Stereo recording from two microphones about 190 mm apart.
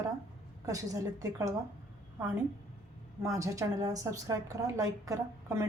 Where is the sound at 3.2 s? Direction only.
15° right (ahead or behind).